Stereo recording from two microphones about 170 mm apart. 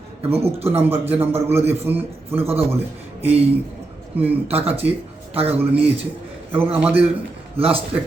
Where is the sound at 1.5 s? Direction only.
15° right (ahead or behind).